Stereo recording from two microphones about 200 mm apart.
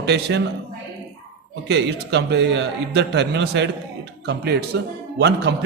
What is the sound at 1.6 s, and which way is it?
A man's voice, 55° right (ahead or behind).